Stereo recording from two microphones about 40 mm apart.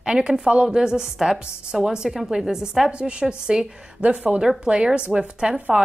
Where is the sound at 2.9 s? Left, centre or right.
Right.